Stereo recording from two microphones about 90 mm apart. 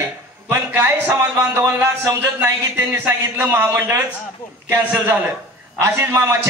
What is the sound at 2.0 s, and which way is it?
Speech, 25° right (ahead or behind).